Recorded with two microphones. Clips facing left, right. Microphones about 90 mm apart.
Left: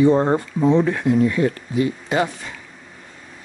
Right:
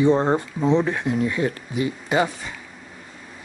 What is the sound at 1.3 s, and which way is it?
Speech, 20° right (ahead or behind).